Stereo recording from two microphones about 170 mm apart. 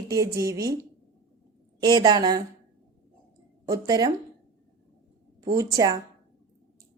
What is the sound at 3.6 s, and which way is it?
Speech, 20° right (ahead or behind).